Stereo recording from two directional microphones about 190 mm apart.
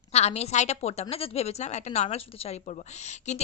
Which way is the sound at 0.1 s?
35° left (ahead or behind).